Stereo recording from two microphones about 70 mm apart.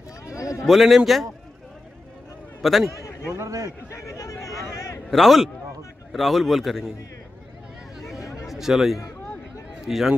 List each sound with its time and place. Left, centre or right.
0.3 s a man's voice: left
0.7 s speech: centre
2.6 s speech: centre
2.9 s a man's voice: left
3.3 s a man's voice: right
3.9 s a sound: left
5.1 s speech: centre
8.2 s a sound: left
8.5 s speech: centre